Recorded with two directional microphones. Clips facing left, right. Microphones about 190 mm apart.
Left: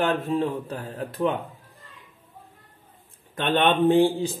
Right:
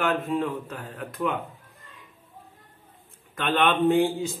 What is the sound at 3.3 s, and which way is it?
Speech, 30° left (ahead or behind).